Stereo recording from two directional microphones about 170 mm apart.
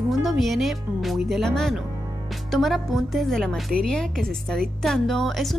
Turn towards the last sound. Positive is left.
turn(degrees=0)  # may be behind; listen again after turning